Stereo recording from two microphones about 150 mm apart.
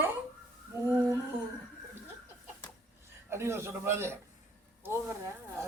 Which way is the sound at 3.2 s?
15° right (ahead or behind).